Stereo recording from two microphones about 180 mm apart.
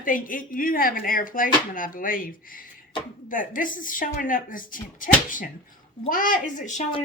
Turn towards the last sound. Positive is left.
turn(degrees=45)  # may be behind; listen again after turning